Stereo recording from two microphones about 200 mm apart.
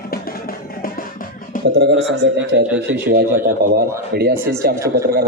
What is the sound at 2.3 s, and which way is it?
Speech, 60° right (ahead or behind).